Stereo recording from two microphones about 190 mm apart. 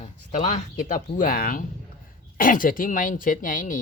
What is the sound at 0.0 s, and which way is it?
Speech, 40° left (ahead or behind).